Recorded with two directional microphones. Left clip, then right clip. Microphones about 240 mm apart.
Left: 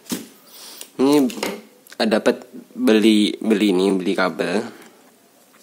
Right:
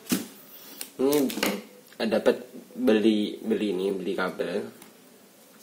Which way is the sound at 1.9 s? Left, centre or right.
Left.